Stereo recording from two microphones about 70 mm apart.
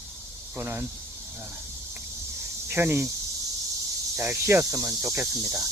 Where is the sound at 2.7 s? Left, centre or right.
Right.